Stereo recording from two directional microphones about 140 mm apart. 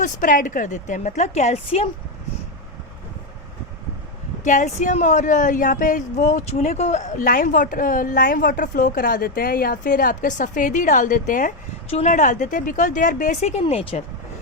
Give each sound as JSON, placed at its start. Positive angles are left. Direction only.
{"t": 0.0, "sound": "a woman's voice", "side_deg": 70}
{"t": 4.4, "sound": "speech", "side_deg": 65}
{"t": 11.9, "sound": "speech", "side_deg": 45}
{"t": 12.1, "sound": "a woman's voice", "side_deg": 65}